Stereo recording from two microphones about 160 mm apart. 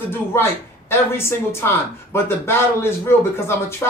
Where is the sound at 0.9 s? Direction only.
15° left (ahead or behind).